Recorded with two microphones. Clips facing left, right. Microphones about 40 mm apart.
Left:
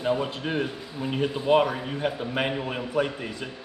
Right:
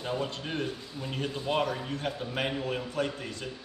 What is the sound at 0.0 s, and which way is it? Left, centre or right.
A man's voice, centre.